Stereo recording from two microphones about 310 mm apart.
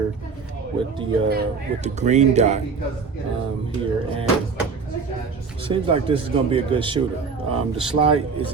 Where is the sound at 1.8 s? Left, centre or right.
Right.